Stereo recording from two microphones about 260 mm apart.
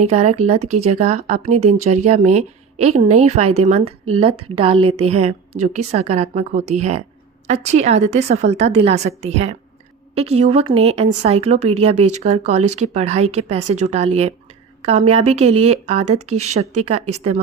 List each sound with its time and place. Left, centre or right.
0.0 s speech: right
11.9 s speech: right
12.2 s a woman's voice: right
16.1 s speech: right
16.6 s speech: right